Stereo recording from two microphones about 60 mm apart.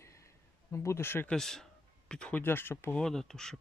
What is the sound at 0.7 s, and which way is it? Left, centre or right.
Speech, left.